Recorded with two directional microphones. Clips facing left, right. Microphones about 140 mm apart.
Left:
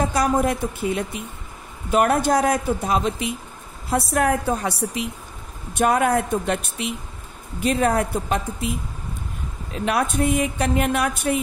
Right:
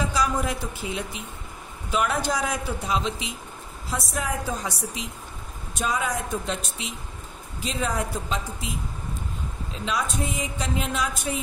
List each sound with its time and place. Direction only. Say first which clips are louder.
0.0 s a woman's voice: left 5 dB; 55° left (ahead or behind)
9.8 s a woman's voice: left 7 dB; 60° left (ahead or behind)